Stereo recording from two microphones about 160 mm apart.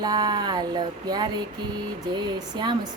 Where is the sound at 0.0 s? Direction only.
25° right (ahead or behind).